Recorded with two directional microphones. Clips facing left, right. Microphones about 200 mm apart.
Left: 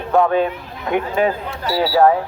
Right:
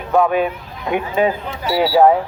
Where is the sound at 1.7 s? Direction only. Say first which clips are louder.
Right 2 dB; centre (ahead or behind).